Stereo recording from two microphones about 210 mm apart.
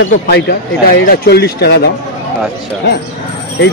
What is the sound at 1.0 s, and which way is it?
Speech, 50° left (ahead or behind).